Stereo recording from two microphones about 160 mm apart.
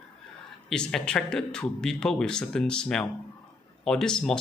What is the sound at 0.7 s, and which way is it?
Speech, 5° left (ahead or behind).